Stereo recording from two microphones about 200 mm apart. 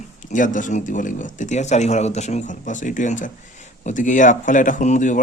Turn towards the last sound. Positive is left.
turn(degrees=40)  # may be behind; listen again after turning